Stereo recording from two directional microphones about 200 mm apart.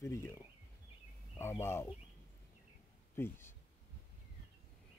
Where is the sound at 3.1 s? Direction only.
10° left (ahead or behind).